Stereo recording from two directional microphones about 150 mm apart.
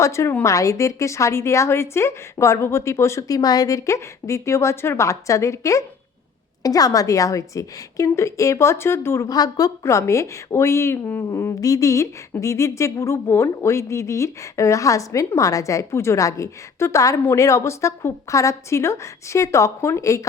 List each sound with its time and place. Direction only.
0.0 s a woman's voice: 20° left (ahead or behind)